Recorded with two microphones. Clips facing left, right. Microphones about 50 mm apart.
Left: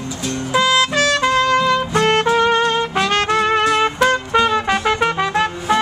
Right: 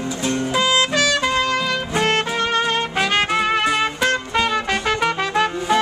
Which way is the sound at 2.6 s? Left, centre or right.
Centre.